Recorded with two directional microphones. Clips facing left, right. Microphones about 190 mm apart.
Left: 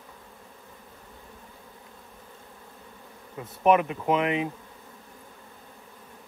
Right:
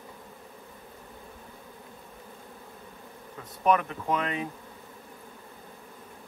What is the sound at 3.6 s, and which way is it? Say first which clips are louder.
Speech: left 4 dB; 20° left (ahead or behind).